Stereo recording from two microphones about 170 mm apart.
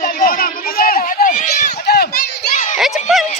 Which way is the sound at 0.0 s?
60° left (ahead or behind).